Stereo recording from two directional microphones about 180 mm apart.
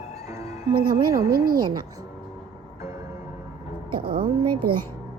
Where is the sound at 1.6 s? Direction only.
25° right (ahead or behind).